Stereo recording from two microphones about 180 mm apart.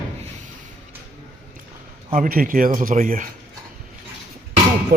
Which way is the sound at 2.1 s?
50° right (ahead or behind).